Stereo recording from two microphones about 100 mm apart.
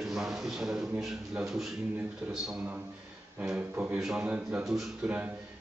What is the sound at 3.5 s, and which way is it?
A man's voice, 15° right (ahead or behind).